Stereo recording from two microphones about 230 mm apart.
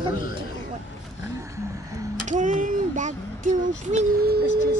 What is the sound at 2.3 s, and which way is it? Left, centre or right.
Speech, right.